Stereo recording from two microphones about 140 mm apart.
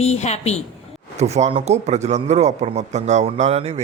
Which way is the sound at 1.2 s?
55° right (ahead or behind).